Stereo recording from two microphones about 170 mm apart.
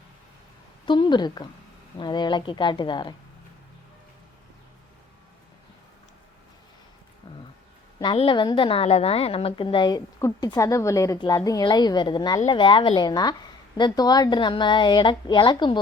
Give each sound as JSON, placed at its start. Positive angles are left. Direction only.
{"t": 0.9, "sound": "a woman's voice", "side_deg": 30}
{"t": 7.9, "sound": "a woman's voice", "side_deg": 30}